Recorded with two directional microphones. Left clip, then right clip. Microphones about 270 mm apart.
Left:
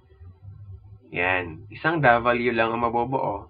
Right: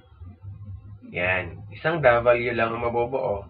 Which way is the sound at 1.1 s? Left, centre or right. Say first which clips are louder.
Left 1 dB; left.